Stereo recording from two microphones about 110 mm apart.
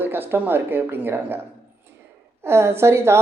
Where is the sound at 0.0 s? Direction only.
20° right (ahead or behind).